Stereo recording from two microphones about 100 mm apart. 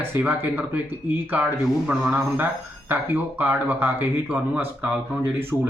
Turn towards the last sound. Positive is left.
turn(degrees=-20)  # may be behind; listen again after turning